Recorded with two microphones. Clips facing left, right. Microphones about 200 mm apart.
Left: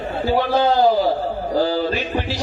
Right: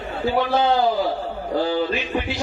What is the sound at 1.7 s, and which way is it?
Speech, 35° left (ahead or behind).